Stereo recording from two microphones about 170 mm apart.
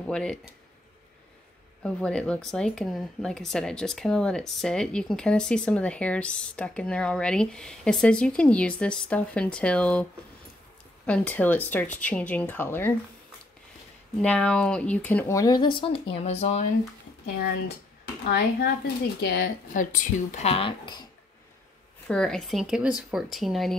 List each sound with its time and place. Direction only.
0.0 s speech: 5° left (ahead or behind)
1.8 s speech: 5° left (ahead or behind)
11.1 s speech: 10° left (ahead or behind)
14.2 s speech: 5° left (ahead or behind); by 16.6 s 40° left (ahead or behind)
18.2 s speech: 70° left (ahead or behind)
19.7 s speech: 50° left (ahead or behind); by 21.0 s 30° left (ahead or behind)
22.0 s speech: 5° left (ahead or behind)